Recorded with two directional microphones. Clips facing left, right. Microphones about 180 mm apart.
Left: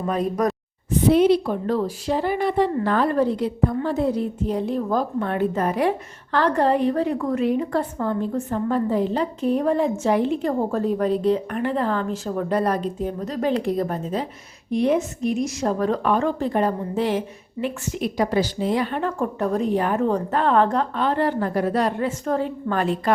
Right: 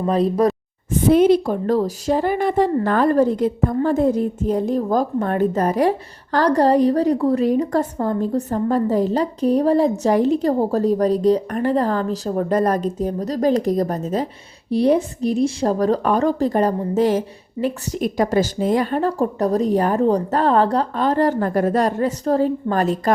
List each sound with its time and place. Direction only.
0.1 s speech: 35° right (ahead or behind)
0.9 s speech: 45° right (ahead or behind)